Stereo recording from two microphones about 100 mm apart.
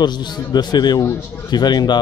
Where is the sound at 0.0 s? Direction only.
45° left (ahead or behind).